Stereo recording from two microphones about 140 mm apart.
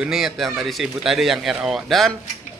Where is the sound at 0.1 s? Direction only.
Centre (ahead or behind).